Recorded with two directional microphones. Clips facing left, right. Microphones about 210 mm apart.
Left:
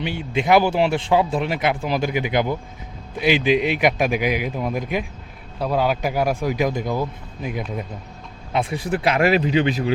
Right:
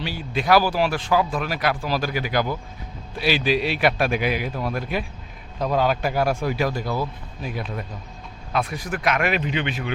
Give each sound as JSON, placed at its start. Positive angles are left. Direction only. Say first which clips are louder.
{"t": 0.0, "sound": "a man's voice", "louder": "left 3 dB", "side_deg": 20}
{"t": 8.5, "sound": "speech", "louder": "left 4 dB", "side_deg": 25}